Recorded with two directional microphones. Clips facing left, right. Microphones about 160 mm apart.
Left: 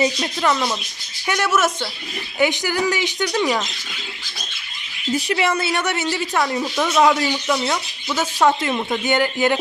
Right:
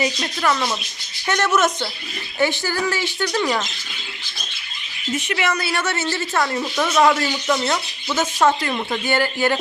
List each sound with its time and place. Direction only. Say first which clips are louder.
0.0 s speech: left 2 dB; 15° left (ahead or behind)
2.4 s speech: left 1 dB; 15° left (ahead or behind)
5.1 s a woman's voice: left 3 dB; 30° left (ahead or behind)